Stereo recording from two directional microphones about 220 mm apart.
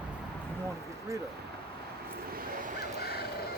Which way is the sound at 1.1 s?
15° right (ahead or behind).